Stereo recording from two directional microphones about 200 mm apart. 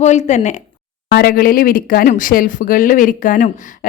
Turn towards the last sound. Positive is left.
turn(degrees=40)  # may be behind; listen again after turning